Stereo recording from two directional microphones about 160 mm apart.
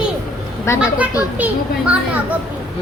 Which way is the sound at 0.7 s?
20° left (ahead or behind).